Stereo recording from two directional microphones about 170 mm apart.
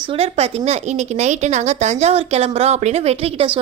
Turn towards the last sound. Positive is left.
turn(degrees=-35)  # may be behind; listen again after turning